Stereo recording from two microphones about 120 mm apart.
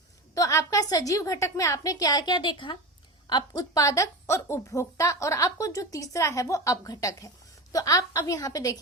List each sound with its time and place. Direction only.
0.3 s a woman's voice: 30° left (ahead or behind)